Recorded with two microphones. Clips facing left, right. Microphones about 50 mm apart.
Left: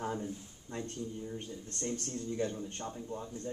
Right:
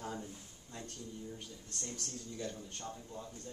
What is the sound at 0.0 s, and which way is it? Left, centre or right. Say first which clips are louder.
Speech: left 6 dB; left.